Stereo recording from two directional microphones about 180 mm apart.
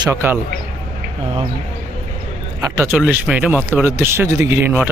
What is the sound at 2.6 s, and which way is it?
Speech, 15° right (ahead or behind).